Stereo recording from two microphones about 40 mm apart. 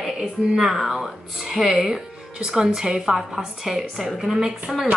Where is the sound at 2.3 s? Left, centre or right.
Centre.